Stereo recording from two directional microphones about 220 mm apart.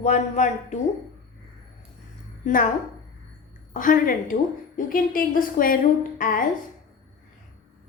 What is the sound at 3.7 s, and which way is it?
A woman's voice, 35° left (ahead or behind).